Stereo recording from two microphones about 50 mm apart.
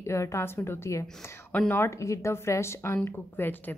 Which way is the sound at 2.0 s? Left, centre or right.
Left.